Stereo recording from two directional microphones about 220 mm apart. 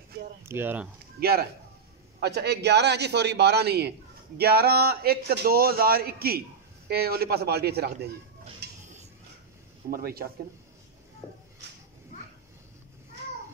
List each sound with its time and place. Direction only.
0.5 s speech: 10° right (ahead or behind)
1.2 s a man's voice: 45° right (ahead or behind)
8.6 s a sound: 50° right (ahead or behind)
9.8 s a man's voice: 45° right (ahead or behind)